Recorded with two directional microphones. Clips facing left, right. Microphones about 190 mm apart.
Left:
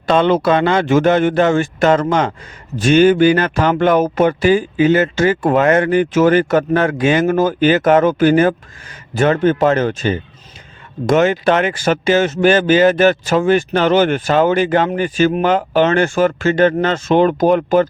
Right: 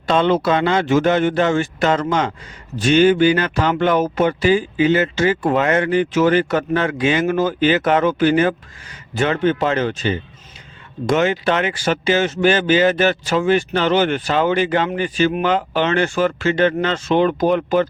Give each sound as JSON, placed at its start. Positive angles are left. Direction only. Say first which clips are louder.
{"t": 0.0, "sound": "speech", "louder": "left 3 dB", "side_deg": 55}